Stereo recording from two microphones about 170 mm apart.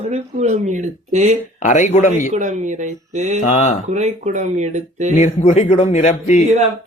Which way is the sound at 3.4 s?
45° left (ahead or behind).